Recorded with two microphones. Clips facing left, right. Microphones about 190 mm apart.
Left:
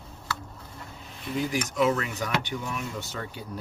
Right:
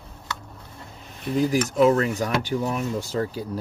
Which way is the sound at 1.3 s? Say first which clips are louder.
Right 7 dB; 35° right (ahead or behind).